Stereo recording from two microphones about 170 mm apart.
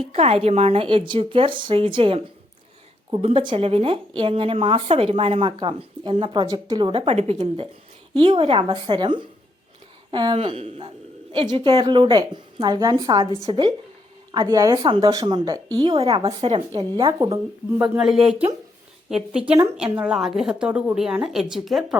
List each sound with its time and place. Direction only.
0.0 s a woman's voice: 35° right (ahead or behind)
14.3 s a woman's voice: 20° right (ahead or behind); by 16.8 s 35° right (ahead or behind)
17.2 s speech: 20° right (ahead or behind)
17.8 s a woman's voice: 5° right (ahead or behind)